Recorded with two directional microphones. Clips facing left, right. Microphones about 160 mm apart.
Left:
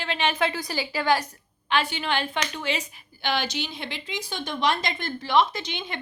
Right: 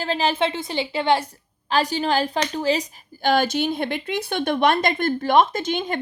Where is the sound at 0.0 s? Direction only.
35° right (ahead or behind).